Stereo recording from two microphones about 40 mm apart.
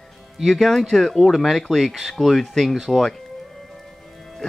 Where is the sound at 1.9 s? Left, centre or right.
Centre.